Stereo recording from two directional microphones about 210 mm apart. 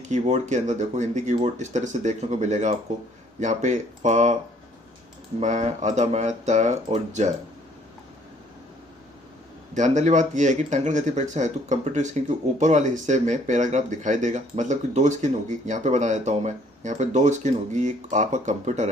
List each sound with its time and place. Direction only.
0.0 s speech: 35° right (ahead or behind)
5.4 s speech: 35° right (ahead or behind)
9.7 s speech: 35° right (ahead or behind)